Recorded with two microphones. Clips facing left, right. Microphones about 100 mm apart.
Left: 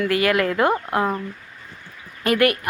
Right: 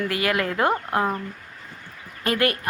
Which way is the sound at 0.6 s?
20° left (ahead or behind).